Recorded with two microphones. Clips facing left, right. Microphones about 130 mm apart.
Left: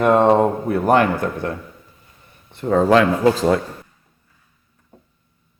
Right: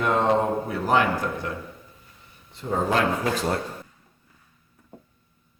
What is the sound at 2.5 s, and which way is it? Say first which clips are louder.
Speech: left 10 dB; 70° left (ahead or behind).